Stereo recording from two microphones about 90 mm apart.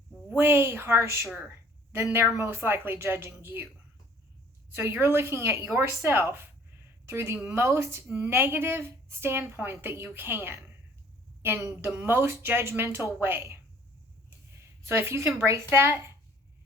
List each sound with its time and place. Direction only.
0.3 s a woman's voice: 30° right (ahead or behind)
2.3 s a woman's voice: 30° right (ahead or behind)
4.7 s a woman's voice: 30° right (ahead or behind)
14.8 s a woman's voice: 30° right (ahead or behind)